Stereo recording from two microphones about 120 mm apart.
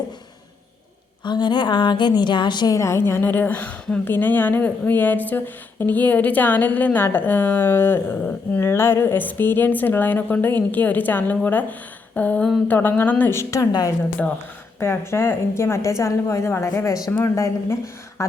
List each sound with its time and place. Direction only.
1.2 s a woman's voice: 40° left (ahead or behind)